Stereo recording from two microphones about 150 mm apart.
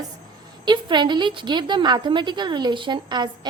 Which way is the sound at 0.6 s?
30° right (ahead or behind).